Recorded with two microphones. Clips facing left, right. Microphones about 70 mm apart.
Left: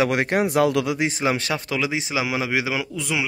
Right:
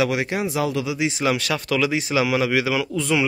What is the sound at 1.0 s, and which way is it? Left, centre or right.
Speech, left.